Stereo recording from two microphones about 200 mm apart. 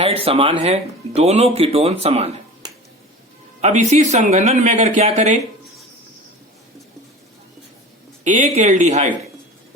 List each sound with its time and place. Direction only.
0.0 s speech: 30° right (ahead or behind)
8.2 s speech: 35° right (ahead or behind)